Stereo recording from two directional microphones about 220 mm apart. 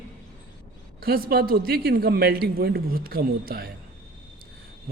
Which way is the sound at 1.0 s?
45° right (ahead or behind).